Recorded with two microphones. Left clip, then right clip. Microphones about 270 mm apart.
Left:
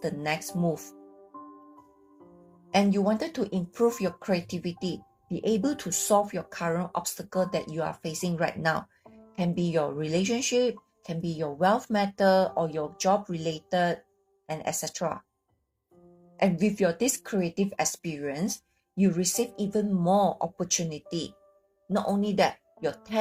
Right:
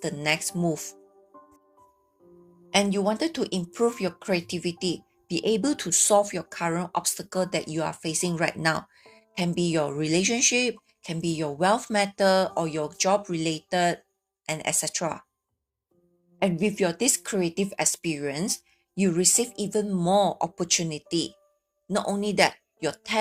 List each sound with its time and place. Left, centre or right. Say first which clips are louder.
0.0 s speech: right 4 dB; right
2.6 s speech: right 1 dB; right
16.4 s speech: right 1 dB; right